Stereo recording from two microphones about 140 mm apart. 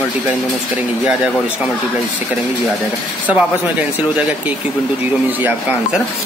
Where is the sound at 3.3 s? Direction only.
10° right (ahead or behind).